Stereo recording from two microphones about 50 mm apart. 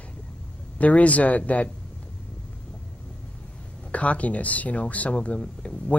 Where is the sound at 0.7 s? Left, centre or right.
Left.